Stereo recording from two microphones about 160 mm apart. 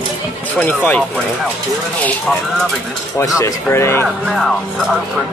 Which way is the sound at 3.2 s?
20° left (ahead or behind).